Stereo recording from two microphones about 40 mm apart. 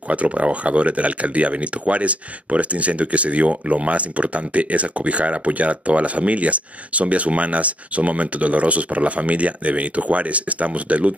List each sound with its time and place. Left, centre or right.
0.1 s speech: right